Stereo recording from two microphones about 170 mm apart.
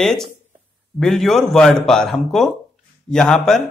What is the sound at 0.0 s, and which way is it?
Speech, centre (ahead or behind).